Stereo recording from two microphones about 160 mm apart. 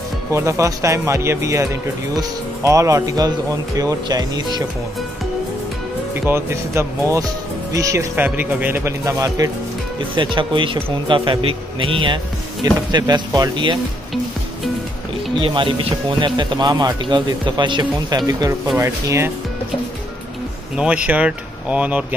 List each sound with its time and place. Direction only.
0.3 s speech: 20° right (ahead or behind)
6.2 s speech: 15° right (ahead or behind)
15.4 s speech: 30° right (ahead or behind); by 19.3 s 15° right (ahead or behind)
20.7 s speech: 5° right (ahead or behind)